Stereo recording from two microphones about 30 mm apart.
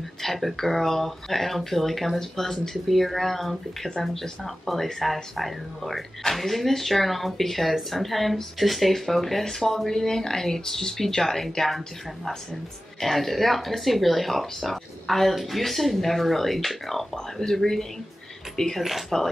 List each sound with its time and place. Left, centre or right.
0.2 s speech: centre
13.0 s speech: centre
17.1 s speech: left
17.6 s speech: centre
18.8 s speech: centre